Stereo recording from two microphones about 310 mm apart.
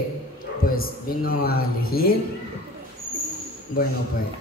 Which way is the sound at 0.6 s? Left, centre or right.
Left.